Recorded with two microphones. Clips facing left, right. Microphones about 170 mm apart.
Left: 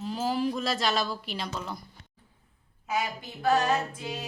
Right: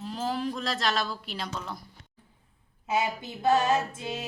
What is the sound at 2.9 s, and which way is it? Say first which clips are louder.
Female singing: right 3 dB; 25° right (ahead or behind).